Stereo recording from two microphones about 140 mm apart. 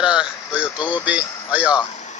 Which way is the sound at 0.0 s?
5° right (ahead or behind).